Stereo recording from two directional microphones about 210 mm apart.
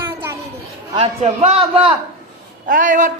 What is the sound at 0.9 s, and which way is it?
A man's voice, 30° right (ahead or behind).